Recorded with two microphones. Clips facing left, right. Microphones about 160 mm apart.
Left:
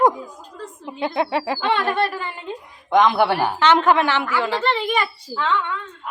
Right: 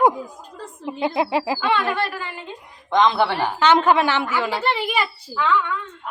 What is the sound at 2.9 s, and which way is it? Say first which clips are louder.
Speech: left 2 dB; 10° left (ahead or behind).